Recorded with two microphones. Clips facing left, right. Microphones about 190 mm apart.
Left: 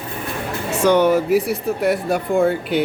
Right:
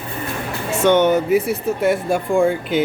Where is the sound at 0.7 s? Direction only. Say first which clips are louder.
Even; centre (ahead or behind).